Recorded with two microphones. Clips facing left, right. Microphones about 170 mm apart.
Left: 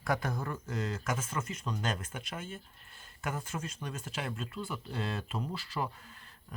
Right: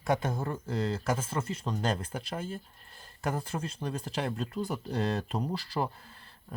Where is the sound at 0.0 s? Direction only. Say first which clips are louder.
Right 4 dB; 25° right (ahead or behind).